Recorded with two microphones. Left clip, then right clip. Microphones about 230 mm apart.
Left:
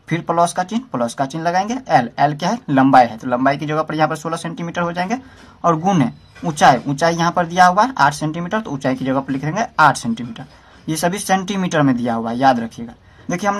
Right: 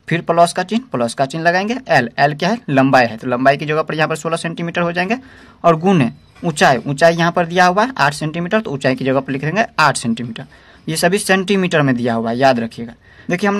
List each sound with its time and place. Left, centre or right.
0.1 s speech: right